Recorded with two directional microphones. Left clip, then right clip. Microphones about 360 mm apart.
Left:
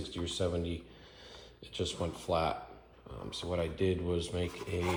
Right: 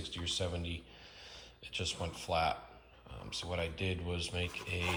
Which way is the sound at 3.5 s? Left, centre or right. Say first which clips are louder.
Left 6 dB; centre.